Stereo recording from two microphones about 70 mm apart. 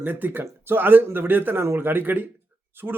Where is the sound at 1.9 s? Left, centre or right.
Right.